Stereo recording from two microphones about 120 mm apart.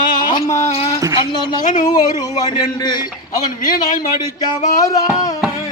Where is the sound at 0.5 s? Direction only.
60° left (ahead or behind).